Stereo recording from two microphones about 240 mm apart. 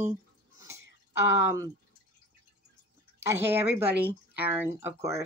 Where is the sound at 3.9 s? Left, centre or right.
Right.